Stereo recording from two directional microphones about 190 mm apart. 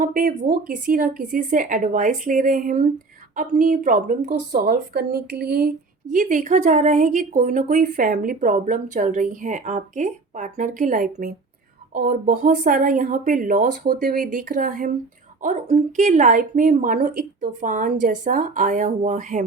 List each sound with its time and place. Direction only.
0.0 s a woman's voice: 45° right (ahead or behind)